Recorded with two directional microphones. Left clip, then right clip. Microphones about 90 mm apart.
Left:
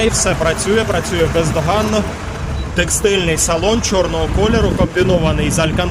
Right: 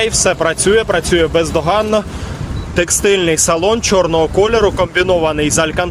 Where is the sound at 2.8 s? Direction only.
50° right (ahead or behind).